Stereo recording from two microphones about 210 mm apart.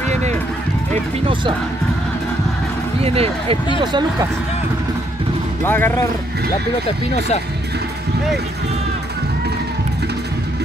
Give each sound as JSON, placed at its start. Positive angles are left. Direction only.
{"t": 0.1, "sound": "run", "side_deg": -35}
{"t": 3.0, "sound": "speech", "side_deg": -30}
{"t": 5.6, "sound": "speech", "side_deg": 10}